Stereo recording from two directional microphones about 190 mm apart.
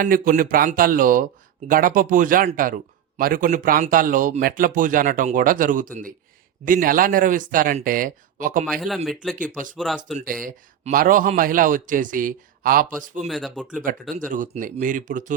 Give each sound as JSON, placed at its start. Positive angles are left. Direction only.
{"t": 0.0, "sound": "a man's voice", "side_deg": -45}
{"t": 8.6, "sound": "speech", "side_deg": 0}
{"t": 10.4, "sound": "a man's voice", "side_deg": -45}
{"t": 13.2, "sound": "speech", "side_deg": 0}
{"t": 14.3, "sound": "a man's voice", "side_deg": -45}